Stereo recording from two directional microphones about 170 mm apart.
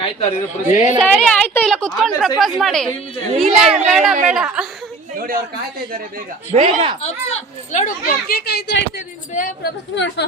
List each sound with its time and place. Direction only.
0.0 s speech: 35° left (ahead or behind)
1.0 s a woman's voice: 5° left (ahead or behind)
4.1 s a woman's voice: 45° right (ahead or behind)
4.4 s a woman's voice: 5° right (ahead or behind)
5.1 s a woman's voice: 55° right (ahead or behind)
6.5 s speech: 35° right (ahead or behind)
7.0 s speech: 40° left (ahead or behind); by 8.8 s 80° left
9.3 s speech: 50° left (ahead or behind)
9.9 s speech: 90° left